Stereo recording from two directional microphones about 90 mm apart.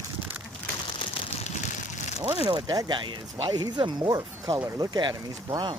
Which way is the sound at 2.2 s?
70° right (ahead or behind).